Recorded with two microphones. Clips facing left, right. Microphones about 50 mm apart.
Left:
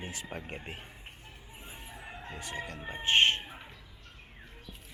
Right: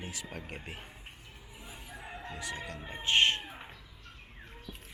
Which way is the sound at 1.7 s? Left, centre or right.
Left.